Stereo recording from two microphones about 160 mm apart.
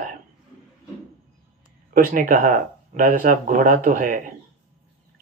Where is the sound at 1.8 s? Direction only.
60° right (ahead or behind).